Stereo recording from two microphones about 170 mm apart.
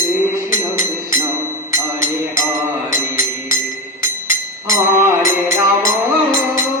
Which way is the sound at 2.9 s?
15° right (ahead or behind).